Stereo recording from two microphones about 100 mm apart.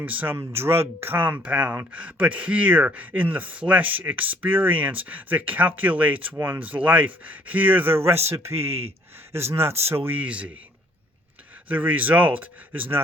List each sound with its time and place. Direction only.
0.0 s speech: 15° right (ahead or behind)
11.7 s speech: 15° right (ahead or behind)